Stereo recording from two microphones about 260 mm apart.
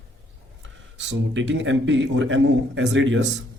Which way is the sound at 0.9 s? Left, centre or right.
Right.